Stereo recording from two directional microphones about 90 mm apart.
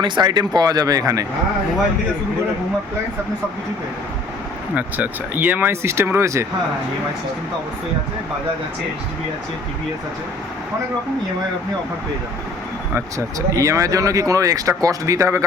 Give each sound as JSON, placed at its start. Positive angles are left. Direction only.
{"t": 0.0, "sound": "speech", "side_deg": -50}
{"t": 4.7, "sound": "speech", "side_deg": -20}
{"t": 12.9, "sound": "speech", "side_deg": -35}